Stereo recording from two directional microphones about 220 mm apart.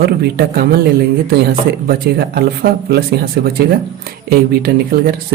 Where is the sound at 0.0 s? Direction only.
45° right (ahead or behind).